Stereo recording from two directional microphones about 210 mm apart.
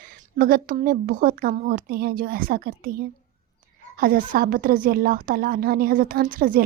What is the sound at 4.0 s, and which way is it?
A woman's voice, 45° right (ahead or behind).